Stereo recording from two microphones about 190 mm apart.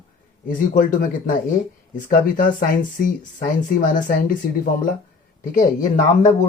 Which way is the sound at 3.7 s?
45° left (ahead or behind).